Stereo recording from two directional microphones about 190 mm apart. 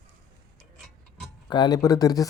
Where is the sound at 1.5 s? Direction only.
25° left (ahead or behind).